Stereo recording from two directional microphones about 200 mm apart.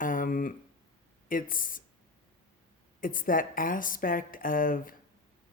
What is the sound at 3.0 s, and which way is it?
Speech, 45° left (ahead or behind).